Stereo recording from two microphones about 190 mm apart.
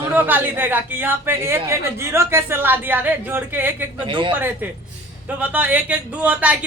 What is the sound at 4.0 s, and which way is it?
Speech, 25° right (ahead or behind).